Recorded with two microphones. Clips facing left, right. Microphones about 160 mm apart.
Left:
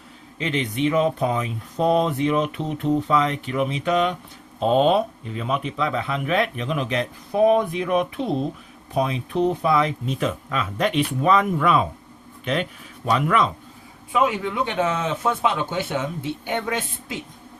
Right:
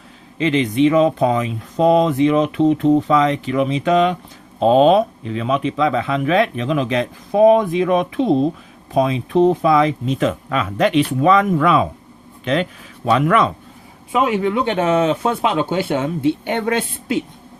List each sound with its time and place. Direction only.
0.3 s speech: 90° right
13.1 s speech: 70° right (ahead or behind)